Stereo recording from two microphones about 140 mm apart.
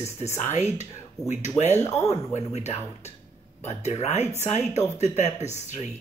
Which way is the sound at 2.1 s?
55° left (ahead or behind).